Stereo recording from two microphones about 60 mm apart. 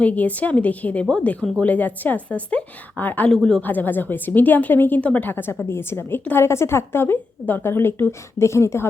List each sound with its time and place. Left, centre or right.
0.0 s a woman's voice: left
3.3 s speech: centre
3.6 s a woman's voice: left
4.9 s a woman's voice: left
8.4 s a woman's voice: left